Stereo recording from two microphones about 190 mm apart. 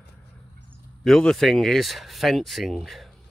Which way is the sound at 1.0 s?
Centre (ahead or behind).